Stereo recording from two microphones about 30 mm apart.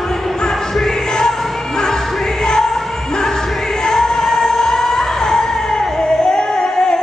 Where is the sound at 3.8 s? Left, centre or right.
Left.